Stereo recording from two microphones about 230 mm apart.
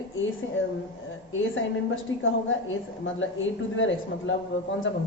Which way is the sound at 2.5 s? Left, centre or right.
Left.